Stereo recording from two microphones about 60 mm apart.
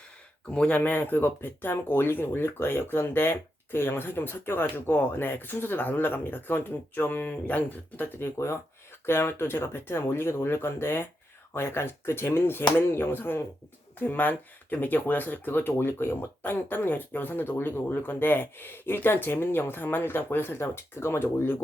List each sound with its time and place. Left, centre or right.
0.4 s speech: centre
0.8 s speech: left